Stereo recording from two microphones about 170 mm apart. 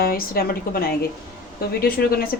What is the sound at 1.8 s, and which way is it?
Speech, 65° left (ahead or behind).